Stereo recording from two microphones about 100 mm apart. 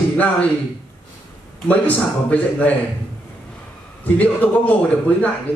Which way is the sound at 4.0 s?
15° left (ahead or behind).